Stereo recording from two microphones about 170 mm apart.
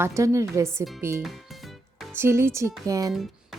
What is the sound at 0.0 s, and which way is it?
Speech, 15° right (ahead or behind).